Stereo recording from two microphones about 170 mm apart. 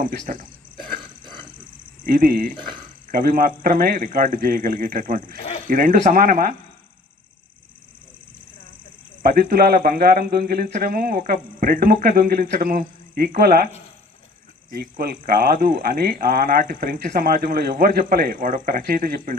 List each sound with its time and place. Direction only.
0.3 s speech: 55° right (ahead or behind)
2.0 s speech: 60° right (ahead or behind)
9.2 s speech: 60° right (ahead or behind)
14.7 s speech: 60° right (ahead or behind)